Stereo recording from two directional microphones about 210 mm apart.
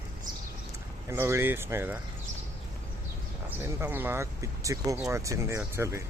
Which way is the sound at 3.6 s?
10° right (ahead or behind).